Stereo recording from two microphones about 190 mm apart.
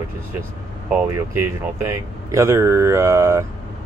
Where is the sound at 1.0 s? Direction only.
15° right (ahead or behind).